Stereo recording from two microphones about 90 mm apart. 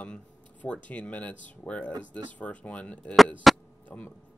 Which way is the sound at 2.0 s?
60° right (ahead or behind).